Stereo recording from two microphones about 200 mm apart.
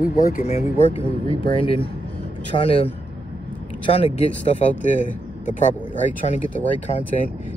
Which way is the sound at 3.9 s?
30° left (ahead or behind).